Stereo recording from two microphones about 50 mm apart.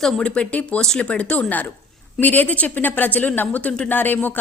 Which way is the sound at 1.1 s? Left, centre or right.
Left.